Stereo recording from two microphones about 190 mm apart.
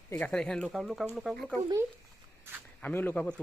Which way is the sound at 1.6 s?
35° right (ahead or behind).